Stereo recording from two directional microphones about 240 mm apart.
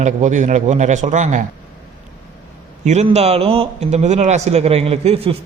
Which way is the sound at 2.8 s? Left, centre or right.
Right.